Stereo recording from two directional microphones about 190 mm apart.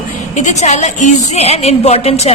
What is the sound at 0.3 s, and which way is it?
A woman's voice, 35° left (ahead or behind).